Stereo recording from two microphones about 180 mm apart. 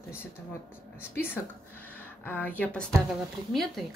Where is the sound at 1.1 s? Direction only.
10° left (ahead or behind).